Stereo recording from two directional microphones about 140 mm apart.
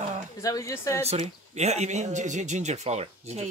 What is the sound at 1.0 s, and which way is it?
Speech, 50° right (ahead or behind).